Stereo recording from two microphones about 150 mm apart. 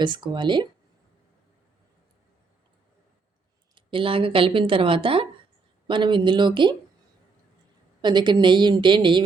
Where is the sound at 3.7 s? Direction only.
35° right (ahead or behind).